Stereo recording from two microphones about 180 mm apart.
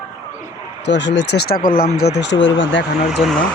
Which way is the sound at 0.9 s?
75° left (ahead or behind).